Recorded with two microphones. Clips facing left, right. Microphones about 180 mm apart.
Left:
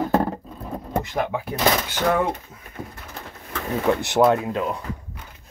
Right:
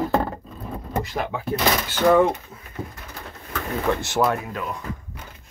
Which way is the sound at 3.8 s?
20° left (ahead or behind).